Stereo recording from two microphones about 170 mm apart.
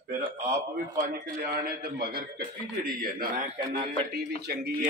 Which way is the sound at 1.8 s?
60° right (ahead or behind).